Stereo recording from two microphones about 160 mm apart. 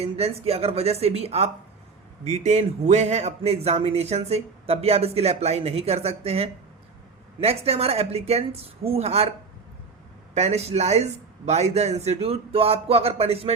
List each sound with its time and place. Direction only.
0.0 s speech: 40° right (ahead or behind)
10.3 s speech: 45° right (ahead or behind)